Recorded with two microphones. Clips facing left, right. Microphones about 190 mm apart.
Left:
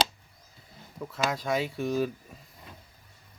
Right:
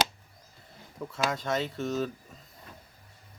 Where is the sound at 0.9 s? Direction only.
5° left (ahead or behind).